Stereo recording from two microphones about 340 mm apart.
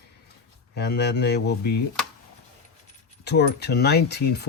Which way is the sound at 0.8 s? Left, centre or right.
Left.